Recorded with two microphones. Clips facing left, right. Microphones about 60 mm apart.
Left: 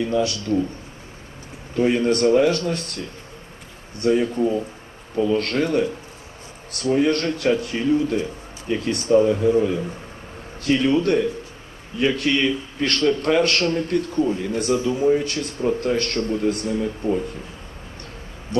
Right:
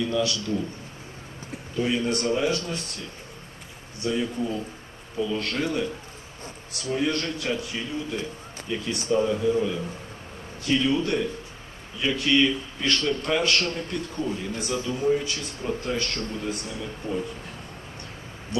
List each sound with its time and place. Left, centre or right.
0.0 s speech: left
1.7 s a man's voice: left
4.0 s a man's voice: left
5.1 s a man's voice: left